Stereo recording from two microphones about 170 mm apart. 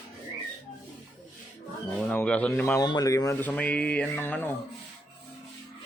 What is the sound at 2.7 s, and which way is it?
Speech, 25° left (ahead or behind).